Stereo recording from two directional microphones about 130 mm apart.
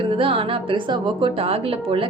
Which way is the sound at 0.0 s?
45° right (ahead or behind).